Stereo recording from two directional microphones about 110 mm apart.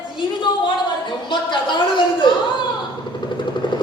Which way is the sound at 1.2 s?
45° left (ahead or behind).